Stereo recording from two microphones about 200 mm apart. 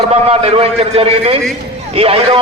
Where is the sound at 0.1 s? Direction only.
30° right (ahead or behind).